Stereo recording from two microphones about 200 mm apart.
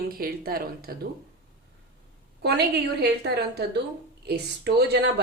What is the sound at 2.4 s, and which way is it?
A woman's voice, 55° right (ahead or behind).